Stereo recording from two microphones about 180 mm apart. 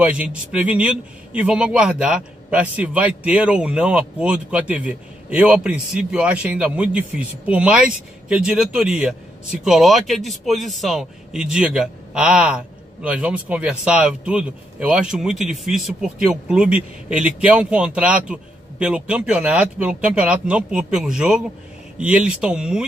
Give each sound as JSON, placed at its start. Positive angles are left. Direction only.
{"t": 0.0, "sound": "a man's voice", "side_deg": -5}